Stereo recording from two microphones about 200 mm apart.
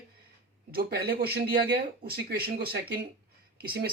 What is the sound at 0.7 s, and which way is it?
Speech, 50° right (ahead or behind).